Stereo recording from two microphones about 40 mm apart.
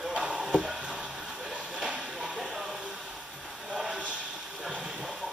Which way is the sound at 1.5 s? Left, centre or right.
Right.